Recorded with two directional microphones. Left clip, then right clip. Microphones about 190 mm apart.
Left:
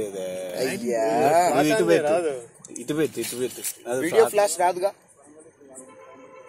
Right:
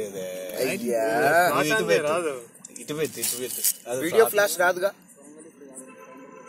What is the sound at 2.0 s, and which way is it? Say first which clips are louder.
Speech: left 3 dB; 20° right (ahead or behind).